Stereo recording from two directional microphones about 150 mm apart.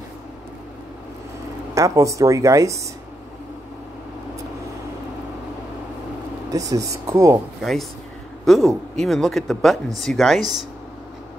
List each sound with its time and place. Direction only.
1.8 s speech: 20° right (ahead or behind)
6.5 s speech: 25° right (ahead or behind)
8.5 s speech: centre (ahead or behind)